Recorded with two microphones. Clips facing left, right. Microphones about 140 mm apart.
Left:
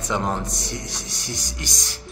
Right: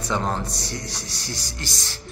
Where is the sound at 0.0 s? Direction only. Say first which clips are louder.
Left 1 dB; 15° left (ahead or behind).